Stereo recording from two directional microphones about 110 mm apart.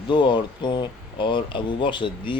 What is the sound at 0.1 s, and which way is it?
Speech, 45° left (ahead or behind).